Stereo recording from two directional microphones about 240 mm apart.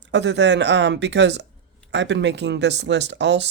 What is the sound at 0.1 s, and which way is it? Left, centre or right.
Speech, right.